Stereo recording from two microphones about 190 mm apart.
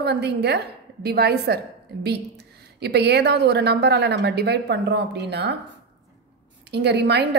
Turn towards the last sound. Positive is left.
turn(degrees=-65)  # may be behind; listen again after turning